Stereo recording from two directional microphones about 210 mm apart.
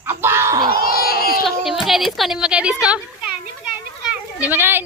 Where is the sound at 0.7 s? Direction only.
45° left (ahead or behind).